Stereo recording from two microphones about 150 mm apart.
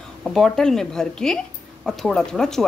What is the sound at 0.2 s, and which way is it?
Speech, 5° left (ahead or behind).